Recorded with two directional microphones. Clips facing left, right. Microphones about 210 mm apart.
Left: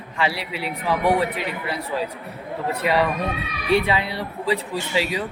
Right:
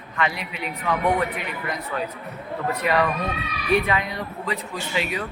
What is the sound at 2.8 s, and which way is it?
Speech, 30° left (ahead or behind).